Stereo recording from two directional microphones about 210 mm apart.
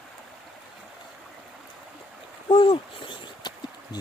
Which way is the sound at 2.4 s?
25° left (ahead or behind).